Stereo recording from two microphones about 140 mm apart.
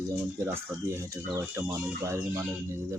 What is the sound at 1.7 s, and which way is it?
Speech, 20° right (ahead or behind).